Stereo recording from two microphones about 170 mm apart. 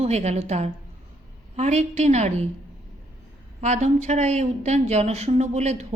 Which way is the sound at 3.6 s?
40° right (ahead or behind).